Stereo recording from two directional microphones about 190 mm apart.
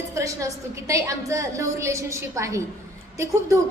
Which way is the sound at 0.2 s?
15° right (ahead or behind).